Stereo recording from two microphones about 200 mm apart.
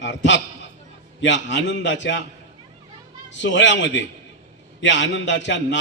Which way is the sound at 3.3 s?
65° left (ahead or behind).